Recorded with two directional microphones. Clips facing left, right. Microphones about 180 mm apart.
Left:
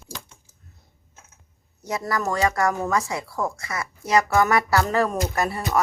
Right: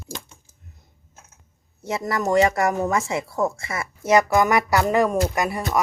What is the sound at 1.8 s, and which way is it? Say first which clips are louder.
Speech: right 2 dB; 25° right (ahead or behind).